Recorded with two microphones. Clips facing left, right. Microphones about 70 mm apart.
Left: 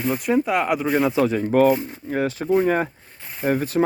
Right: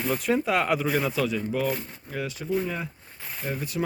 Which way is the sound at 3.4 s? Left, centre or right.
Left.